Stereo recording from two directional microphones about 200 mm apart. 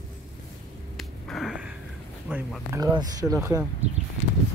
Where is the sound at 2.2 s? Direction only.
10° right (ahead or behind).